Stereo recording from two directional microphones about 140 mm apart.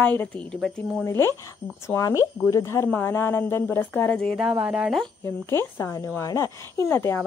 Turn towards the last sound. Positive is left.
turn(degrees=15)  # may be behind; listen again after turning